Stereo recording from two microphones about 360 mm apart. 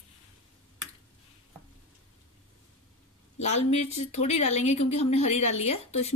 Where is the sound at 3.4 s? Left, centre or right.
Centre.